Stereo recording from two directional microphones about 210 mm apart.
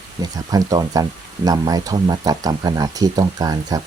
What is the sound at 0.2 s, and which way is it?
Speech, 20° right (ahead or behind).